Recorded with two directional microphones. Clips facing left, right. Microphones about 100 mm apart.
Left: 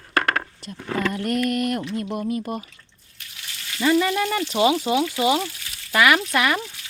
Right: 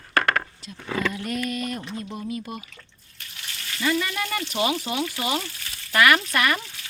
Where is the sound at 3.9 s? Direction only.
25° left (ahead or behind).